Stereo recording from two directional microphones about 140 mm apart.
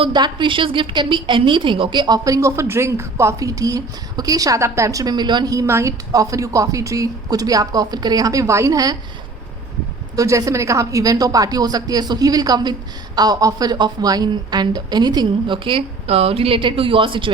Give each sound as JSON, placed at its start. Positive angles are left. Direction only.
{"t": 0.0, "sound": "a woman's voice", "side_deg": -35}
{"t": 10.2, "sound": "a woman's voice", "side_deg": -25}